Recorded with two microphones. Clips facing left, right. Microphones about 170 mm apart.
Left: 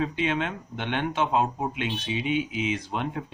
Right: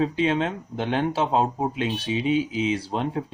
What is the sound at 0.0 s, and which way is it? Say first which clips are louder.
Speech: right 4 dB; 35° right (ahead or behind).